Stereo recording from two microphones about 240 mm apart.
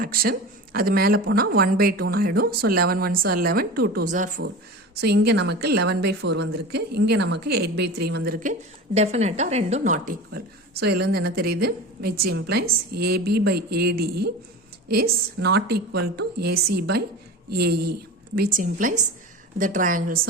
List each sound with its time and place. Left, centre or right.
0.0 s a woman's voice: right
4.9 s a woman's voice: right
9.0 s a woman's voice: right